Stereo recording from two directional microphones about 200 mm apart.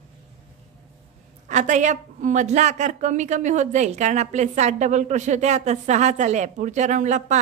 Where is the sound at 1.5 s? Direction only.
35° right (ahead or behind).